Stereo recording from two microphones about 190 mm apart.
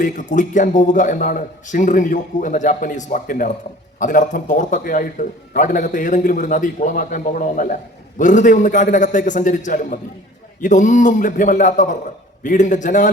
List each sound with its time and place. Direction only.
0.0 s a man's voice: 40° left (ahead or behind)